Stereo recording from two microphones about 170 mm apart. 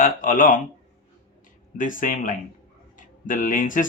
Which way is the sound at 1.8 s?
50° left (ahead or behind).